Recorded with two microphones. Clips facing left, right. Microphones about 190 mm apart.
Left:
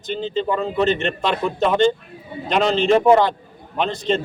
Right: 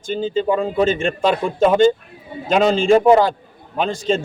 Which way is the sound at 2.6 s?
45° right (ahead or behind).